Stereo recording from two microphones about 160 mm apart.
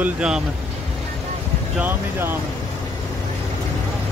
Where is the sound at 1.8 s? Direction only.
15° right (ahead or behind).